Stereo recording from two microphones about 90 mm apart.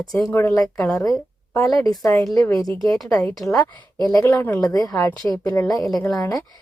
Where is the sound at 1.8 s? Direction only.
40° left (ahead or behind).